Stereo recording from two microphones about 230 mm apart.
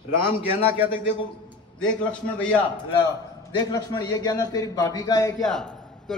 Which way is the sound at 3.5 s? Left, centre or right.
Centre.